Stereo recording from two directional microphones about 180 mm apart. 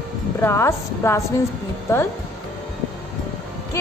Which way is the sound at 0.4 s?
15° left (ahead or behind).